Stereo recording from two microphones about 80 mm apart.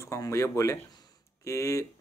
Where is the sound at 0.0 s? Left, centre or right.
Left.